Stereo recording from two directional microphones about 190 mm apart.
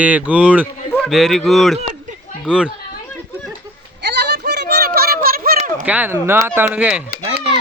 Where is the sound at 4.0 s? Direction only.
60° right (ahead or behind); by 5.9 s 40° right (ahead or behind).